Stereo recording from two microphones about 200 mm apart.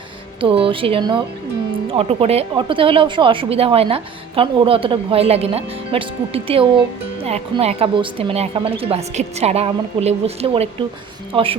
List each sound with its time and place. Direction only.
0.4 s a woman's voice: 25° right (ahead or behind)